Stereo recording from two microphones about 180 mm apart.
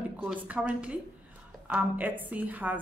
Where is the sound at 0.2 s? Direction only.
10° right (ahead or behind).